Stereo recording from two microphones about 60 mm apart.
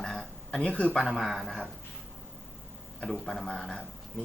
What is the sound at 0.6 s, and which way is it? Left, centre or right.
Speech, left.